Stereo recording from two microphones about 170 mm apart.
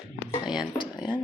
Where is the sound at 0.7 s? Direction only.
25° left (ahead or behind).